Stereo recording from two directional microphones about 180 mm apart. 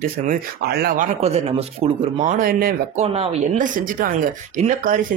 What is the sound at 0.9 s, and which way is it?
Speech, 40° right (ahead or behind).